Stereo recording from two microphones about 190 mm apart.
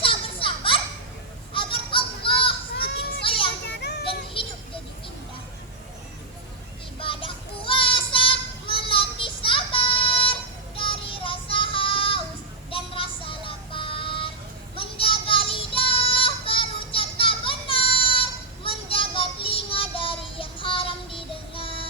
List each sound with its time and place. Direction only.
0.0 s children playing: 25° left (ahead or behind)
1.5 s a sound: 25° left (ahead or behind)
2.8 s children playing: 60° left (ahead or behind)
3.2 s children playing: 25° left (ahead or behind)
3.8 s child singing: 60° left (ahead or behind)
4.4 s music: 25° left (ahead or behind)
7.0 s child singing: 25° left (ahead or behind)